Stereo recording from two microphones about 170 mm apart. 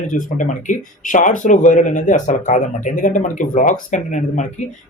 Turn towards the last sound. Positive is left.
turn(degrees=45)  # may be behind; listen again after turning